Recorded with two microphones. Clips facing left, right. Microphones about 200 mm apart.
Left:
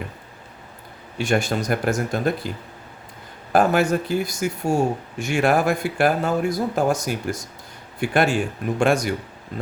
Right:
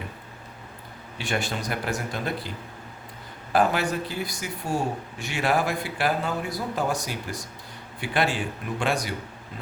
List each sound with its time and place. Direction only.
1.2 s speech: 45° left (ahead or behind)
3.5 s speech: 45° left (ahead or behind)